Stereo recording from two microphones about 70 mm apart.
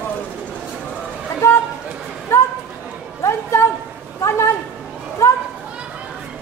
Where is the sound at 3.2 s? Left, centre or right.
Left.